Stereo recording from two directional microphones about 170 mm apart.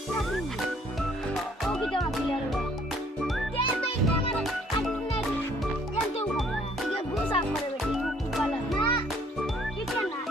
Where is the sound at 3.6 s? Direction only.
35° left (ahead or behind).